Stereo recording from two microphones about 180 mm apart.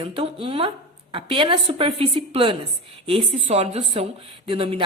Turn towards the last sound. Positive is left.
turn(degrees=-30)  # may be behind; listen again after turning